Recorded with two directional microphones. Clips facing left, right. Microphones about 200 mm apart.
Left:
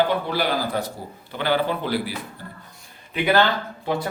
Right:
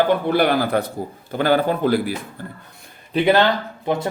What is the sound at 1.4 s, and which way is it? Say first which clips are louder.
Speech: right 5 dB; 45° right (ahead or behind).